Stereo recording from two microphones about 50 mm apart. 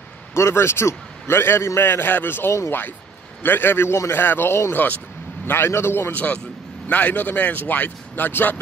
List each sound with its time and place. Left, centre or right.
0.3 s a man's voice: left
5.7 s a man's voice: left
6.1 s a man's voice: left